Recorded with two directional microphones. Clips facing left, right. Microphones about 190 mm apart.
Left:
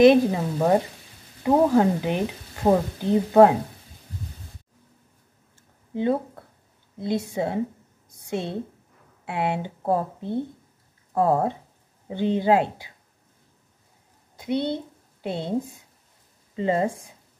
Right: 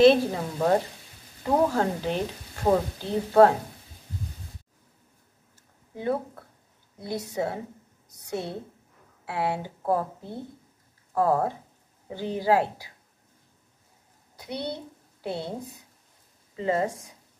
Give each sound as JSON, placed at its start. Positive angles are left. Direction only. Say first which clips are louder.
{"t": 0.0, "sound": "speech", "louder": "left 3 dB", "side_deg": 15}
{"t": 5.9, "sound": "a woman's voice", "louder": "left 5 dB", "side_deg": 20}
{"t": 14.3, "sound": "a woman's voice", "louder": "left 8 dB", "side_deg": 25}